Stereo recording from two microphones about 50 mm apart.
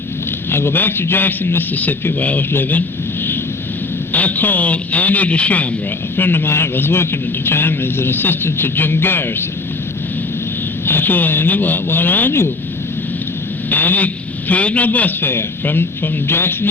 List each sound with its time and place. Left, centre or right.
0.5 s a man's voice: left
1.7 s speech: left
4.1 s speech: left
6.1 s a man's voice: left
10.8 s speech: left
13.7 s a man's voice: left